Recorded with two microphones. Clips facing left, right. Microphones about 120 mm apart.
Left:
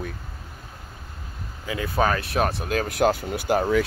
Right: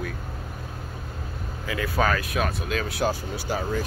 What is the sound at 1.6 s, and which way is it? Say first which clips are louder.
Speech: left 1 dB; 25° left (ahead or behind).